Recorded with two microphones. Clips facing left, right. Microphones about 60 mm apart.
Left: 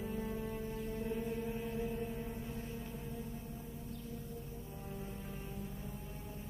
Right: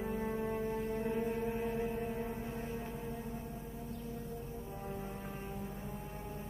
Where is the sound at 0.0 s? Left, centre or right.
Right.